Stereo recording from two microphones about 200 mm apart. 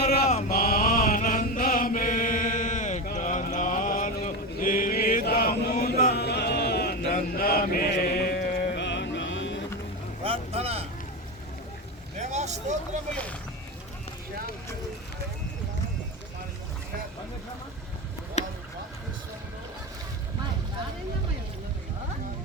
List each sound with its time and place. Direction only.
0.3 s chant: 40° left (ahead or behind); by 9.6 s 65° left (ahead or behind)
10.2 s boat: 30° right (ahead or behind)
12.2 s vehicle: 35° right (ahead or behind)